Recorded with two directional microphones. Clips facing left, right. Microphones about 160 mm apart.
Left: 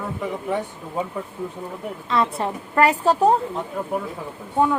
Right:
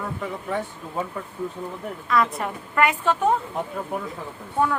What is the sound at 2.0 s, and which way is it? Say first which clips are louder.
Speech: left 1 dB; 25° left (ahead or behind).